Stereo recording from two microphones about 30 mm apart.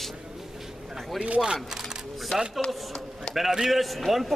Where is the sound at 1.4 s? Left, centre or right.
Right.